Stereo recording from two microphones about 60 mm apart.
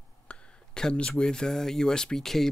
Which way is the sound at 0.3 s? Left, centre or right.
Centre.